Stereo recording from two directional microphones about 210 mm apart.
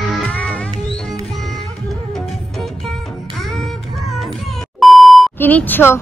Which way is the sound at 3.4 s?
Centre (ahead or behind).